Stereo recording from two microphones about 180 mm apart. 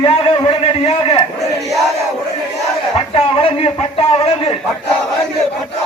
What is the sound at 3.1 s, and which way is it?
A man's voice, 30° left (ahead or behind).